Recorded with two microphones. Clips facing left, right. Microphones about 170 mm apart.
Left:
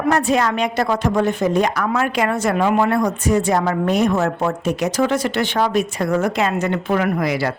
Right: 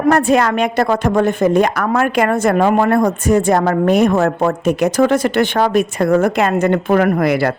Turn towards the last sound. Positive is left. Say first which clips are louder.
# right 5 dB
turn(degrees=-55)  # may be behind; listen again after turning